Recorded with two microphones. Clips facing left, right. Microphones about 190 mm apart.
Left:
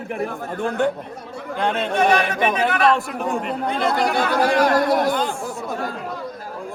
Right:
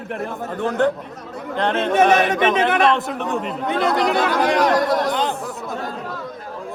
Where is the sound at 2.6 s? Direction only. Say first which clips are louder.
Right 1 dB; centre (ahead or behind).